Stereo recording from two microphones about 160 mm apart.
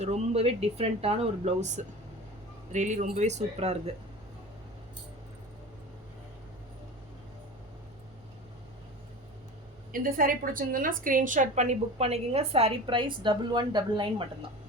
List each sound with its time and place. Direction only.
0.0 s a woman's voice: 40° right (ahead or behind)
9.9 s a woman's voice: 60° right (ahead or behind); by 14.3 s 30° right (ahead or behind)